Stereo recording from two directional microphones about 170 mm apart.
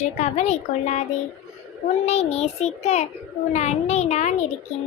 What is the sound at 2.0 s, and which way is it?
A child's voice, 40° left (ahead or behind).